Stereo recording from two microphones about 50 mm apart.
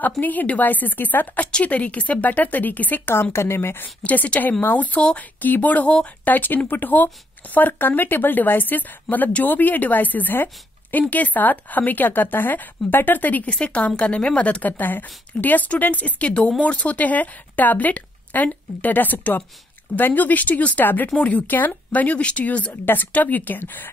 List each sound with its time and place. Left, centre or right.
0.2 s speech: left
3.1 s speech: left
3.8 s speech: left